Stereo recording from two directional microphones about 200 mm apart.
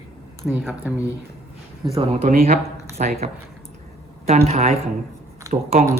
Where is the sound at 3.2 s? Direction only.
35° right (ahead or behind).